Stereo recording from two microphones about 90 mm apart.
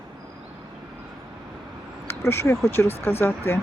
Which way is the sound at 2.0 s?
30° left (ahead or behind).